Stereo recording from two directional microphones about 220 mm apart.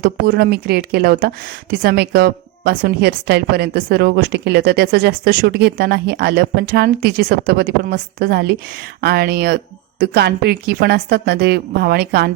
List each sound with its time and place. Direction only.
0.0 s speech: 45° right (ahead or behind)